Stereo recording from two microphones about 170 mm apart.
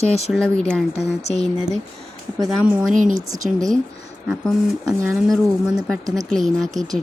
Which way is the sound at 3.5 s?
Centre (ahead or behind).